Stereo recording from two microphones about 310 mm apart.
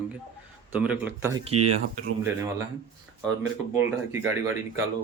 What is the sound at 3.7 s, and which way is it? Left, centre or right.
Speech, centre.